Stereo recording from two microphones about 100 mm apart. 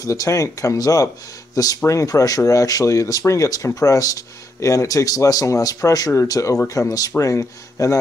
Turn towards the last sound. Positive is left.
turn(degrees=30)  # may be behind; listen again after turning